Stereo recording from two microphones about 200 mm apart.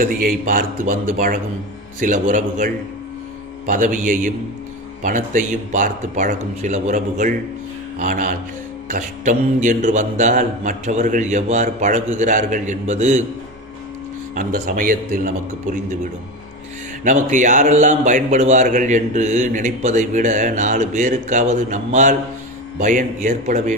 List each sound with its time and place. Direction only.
0.0 s a man's voice: 45° right (ahead or behind)
14.4 s a man's voice: 45° right (ahead or behind)